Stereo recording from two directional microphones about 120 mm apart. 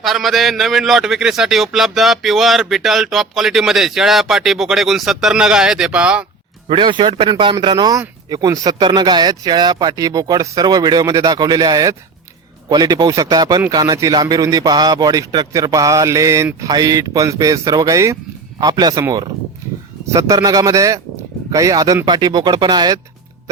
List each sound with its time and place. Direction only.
0.0 s a man's voice: centre (ahead or behind)
6.7 s speech: 40° right (ahead or behind)
20.1 s speech: 25° right (ahead or behind)